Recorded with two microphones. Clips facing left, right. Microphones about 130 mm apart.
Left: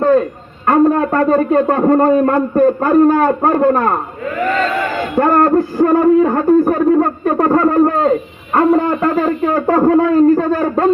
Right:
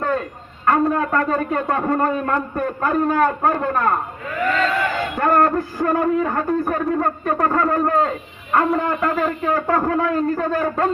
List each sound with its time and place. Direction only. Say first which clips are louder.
0.0 s a man's voice: left 10 dB; 30° left (ahead or behind)
5.1 s a sound: left 6 dB; 30° left (ahead or behind)
8.5 s speech: left 6 dB; 35° left (ahead or behind)